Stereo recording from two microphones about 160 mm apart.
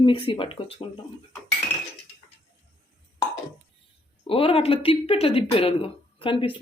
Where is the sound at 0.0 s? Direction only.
35° left (ahead or behind).